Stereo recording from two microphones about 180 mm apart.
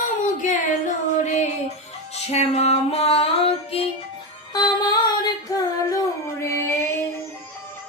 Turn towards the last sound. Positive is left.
turn(degrees=15)  # may be behind; listen again after turning